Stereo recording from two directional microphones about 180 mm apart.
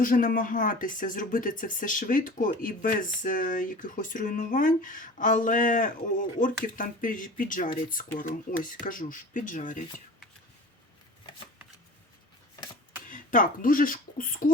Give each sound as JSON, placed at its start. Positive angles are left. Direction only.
{"t": 0.0, "sound": "speech", "side_deg": 50}
{"t": 13.1, "sound": "speech", "side_deg": 45}